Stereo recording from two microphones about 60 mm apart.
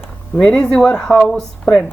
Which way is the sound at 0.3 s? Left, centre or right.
Centre.